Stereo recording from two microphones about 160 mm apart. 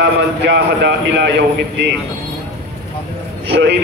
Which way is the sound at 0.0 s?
90° right.